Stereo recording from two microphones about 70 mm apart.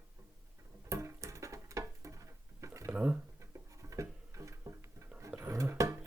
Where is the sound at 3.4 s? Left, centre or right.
Right.